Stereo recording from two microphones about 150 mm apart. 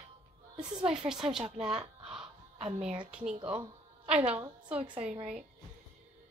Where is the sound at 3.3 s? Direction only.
35° right (ahead or behind).